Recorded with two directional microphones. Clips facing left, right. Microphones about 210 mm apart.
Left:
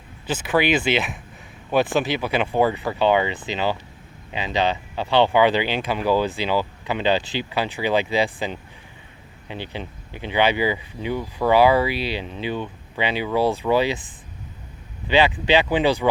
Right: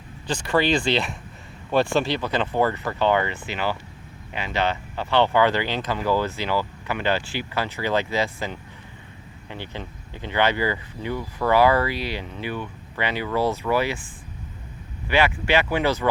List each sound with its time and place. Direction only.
0.3 s speech: 5° left (ahead or behind)